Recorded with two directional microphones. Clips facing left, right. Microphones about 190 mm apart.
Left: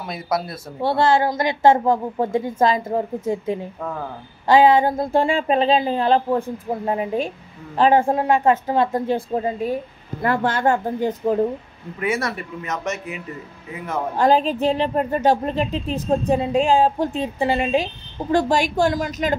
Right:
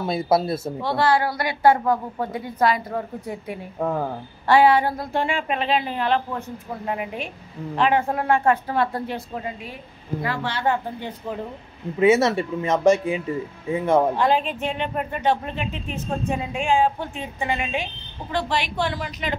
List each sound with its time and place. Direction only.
0.0 s speech: 30° right (ahead or behind)
0.8 s speech: 25° left (ahead or behind)
9.3 s speech: 35° left (ahead or behind)
10.2 s speech: 50° left (ahead or behind)
12.0 s speech: 25° right (ahead or behind)
14.1 s speech: 40° left (ahead or behind)